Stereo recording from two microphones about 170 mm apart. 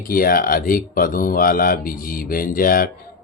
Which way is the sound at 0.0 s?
60° left (ahead or behind).